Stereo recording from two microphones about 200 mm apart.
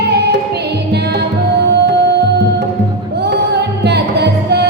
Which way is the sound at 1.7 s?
55° right (ahead or behind).